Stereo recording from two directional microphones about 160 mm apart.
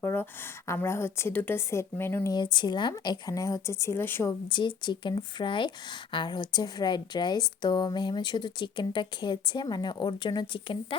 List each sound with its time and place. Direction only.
0.0 s speech: 15° left (ahead or behind)
2.3 s a woman's voice: 30° left (ahead or behind)